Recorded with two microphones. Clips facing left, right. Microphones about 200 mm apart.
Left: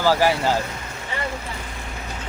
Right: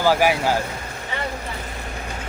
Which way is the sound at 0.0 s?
15° right (ahead or behind).